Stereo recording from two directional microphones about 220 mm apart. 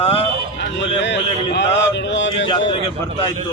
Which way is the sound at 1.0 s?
55° left (ahead or behind).